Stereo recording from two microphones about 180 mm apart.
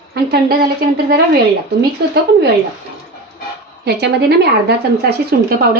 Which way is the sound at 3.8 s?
70° right (ahead or behind).